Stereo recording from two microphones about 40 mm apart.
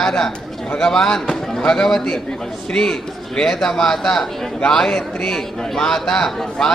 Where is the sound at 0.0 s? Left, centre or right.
Centre.